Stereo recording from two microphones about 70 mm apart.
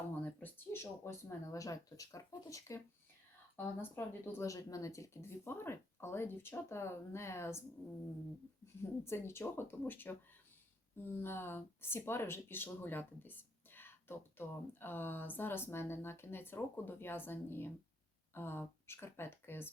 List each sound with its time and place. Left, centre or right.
0.1 s speech: left
3.8 s speech: left
4.4 s speech: left
8.6 s speech: left